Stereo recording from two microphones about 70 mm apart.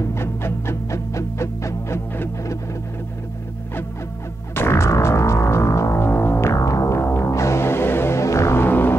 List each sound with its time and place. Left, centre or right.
0.1 s music: left
4.6 s music: left
6.5 s music: left
7.0 s music: left